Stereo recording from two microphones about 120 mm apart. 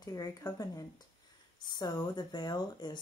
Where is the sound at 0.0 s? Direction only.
30° left (ahead or behind).